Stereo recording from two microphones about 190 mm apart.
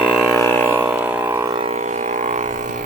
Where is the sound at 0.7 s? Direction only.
10° right (ahead or behind).